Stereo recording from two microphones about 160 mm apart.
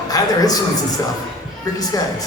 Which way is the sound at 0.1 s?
25° left (ahead or behind).